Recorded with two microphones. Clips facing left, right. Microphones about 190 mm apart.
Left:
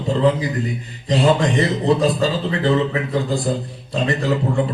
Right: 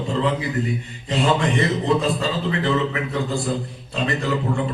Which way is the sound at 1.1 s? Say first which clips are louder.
Left 4 dB; 35° left (ahead or behind).